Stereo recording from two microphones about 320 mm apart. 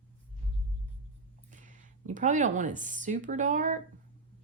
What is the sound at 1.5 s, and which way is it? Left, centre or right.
Speech, right.